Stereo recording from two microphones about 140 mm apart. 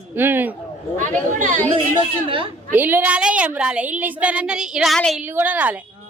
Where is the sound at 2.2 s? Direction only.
40° right (ahead or behind).